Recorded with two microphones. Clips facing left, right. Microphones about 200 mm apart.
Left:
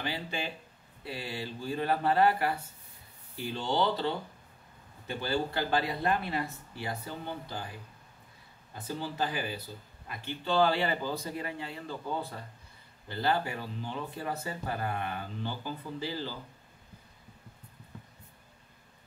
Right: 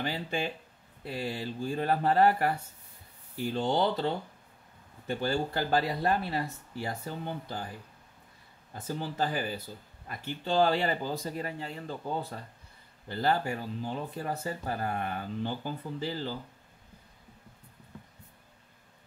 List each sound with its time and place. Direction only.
0.0 s speech: 45° right (ahead or behind)
8.7 s speech: 45° right (ahead or behind)